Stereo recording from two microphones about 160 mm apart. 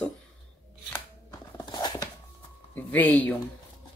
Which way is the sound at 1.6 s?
25° left (ahead or behind).